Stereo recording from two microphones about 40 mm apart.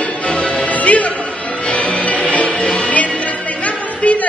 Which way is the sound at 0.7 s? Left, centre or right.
Left.